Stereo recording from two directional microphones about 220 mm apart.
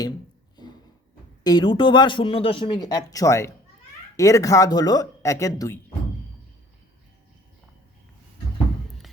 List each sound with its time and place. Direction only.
1.5 s speech: 20° left (ahead or behind)